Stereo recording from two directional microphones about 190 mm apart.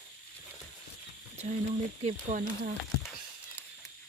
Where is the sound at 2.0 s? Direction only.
40° right (ahead or behind).